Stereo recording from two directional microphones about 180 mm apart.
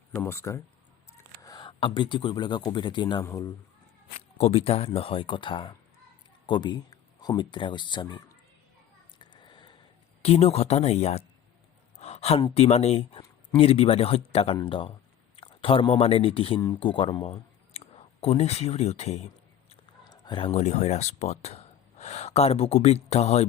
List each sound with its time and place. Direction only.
0.1 s speech: 15° left (ahead or behind)
4.4 s speech: 35° left (ahead or behind)
9.1 s a sound: 25° left (ahead or behind)
10.2 s speech: 35° left (ahead or behind)
19.7 s speech: 25° left (ahead or behind)